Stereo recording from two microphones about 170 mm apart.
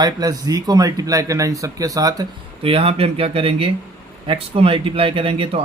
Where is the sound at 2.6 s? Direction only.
35° right (ahead or behind).